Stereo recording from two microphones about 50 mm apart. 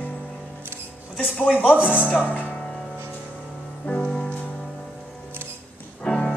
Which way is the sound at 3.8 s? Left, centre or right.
Left.